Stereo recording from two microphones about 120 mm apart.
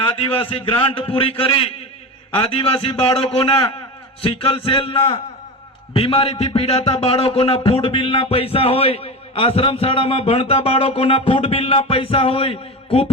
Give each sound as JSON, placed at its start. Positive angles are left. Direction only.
{"t": 0.2, "sound": "a man's voice", "side_deg": 50}